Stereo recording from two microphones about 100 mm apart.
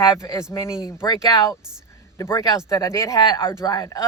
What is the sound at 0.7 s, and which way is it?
Speech, 5° right (ahead or behind).